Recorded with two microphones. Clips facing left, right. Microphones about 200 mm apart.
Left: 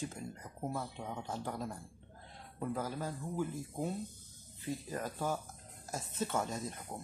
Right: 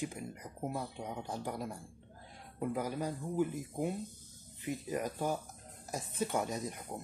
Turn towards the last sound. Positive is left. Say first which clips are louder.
# right 2 dB
turn(degrees=-15)  # may be behind; listen again after turning